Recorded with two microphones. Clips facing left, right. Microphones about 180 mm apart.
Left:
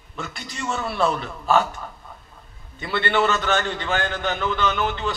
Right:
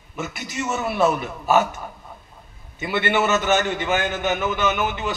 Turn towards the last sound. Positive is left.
turn(degrees=-20)  # may be behind; listen again after turning